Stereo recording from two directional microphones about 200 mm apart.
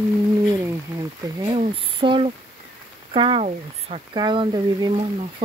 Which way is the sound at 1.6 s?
25° right (ahead or behind).